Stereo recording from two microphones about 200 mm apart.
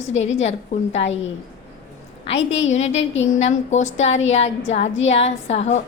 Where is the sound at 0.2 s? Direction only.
35° left (ahead or behind).